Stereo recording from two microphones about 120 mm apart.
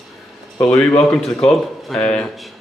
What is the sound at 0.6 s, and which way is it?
Speech, 20° left (ahead or behind).